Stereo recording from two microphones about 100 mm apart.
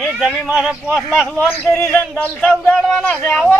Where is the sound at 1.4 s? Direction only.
10° left (ahead or behind).